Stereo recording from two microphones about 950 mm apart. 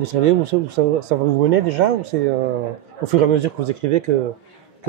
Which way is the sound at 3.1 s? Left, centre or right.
Right.